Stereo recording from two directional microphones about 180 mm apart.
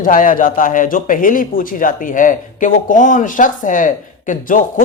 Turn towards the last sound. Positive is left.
turn(degrees=45)  # may be behind; listen again after turning